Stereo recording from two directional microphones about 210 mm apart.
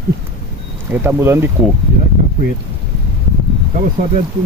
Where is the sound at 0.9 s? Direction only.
10° right (ahead or behind).